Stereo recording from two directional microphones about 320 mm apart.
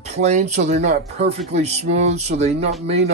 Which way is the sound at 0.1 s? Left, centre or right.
Right.